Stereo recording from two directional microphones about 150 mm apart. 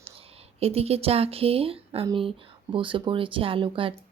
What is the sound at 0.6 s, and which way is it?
Speech, 40° right (ahead or behind).